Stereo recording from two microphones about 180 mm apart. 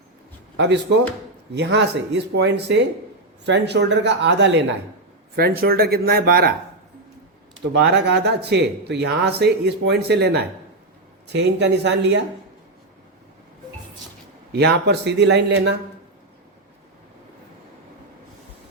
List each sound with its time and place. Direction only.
0.5 s speech: 75° right (ahead or behind)
5.4 s speech: 55° right (ahead or behind)
7.8 s speech: 70° right (ahead or behind)
14.5 s speech: 70° right (ahead or behind)